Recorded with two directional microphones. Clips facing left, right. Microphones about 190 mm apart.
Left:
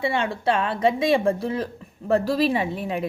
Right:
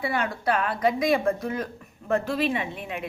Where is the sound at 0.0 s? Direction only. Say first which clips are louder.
Left 3 dB; 25° left (ahead or behind).